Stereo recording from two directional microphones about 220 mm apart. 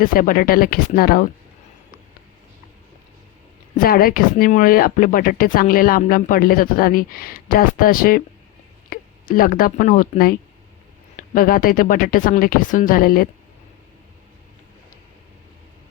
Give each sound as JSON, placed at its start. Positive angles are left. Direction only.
{"t": 0.0, "sound": "speech", "side_deg": 40}
{"t": 3.8, "sound": "speech", "side_deg": 40}